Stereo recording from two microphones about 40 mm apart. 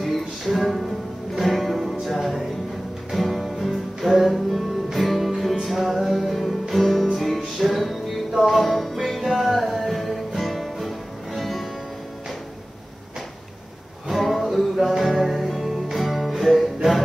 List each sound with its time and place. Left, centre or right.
0.0 s music: centre
14.2 s music: centre